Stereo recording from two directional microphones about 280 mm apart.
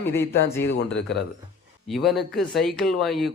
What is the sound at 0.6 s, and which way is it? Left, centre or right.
Speech, left.